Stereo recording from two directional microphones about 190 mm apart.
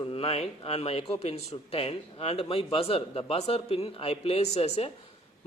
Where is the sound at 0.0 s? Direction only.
30° left (ahead or behind).